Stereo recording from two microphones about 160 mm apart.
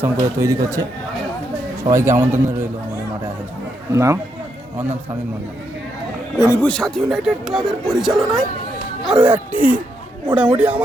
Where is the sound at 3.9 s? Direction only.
20° right (ahead or behind).